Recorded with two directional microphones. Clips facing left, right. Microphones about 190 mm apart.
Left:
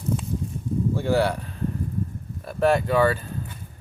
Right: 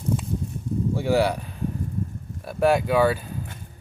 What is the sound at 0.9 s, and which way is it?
Speech, 10° right (ahead or behind).